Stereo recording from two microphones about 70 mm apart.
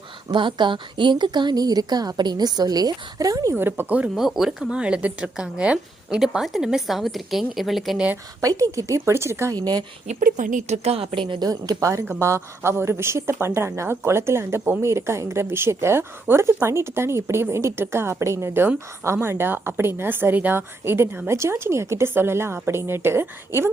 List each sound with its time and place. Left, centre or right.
0.3 s a woman's voice: right
1.1 s a woman's voice: right
3.5 s speech: right
4.1 s speech: centre
6.1 s a woman's voice: centre
8.4 s a woman's voice: right
9.5 s a woman's voice: right
11.3 s a woman's voice: right
12.2 s speech: right